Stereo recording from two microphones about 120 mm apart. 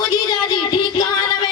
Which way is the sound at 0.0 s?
30° left (ahead or behind).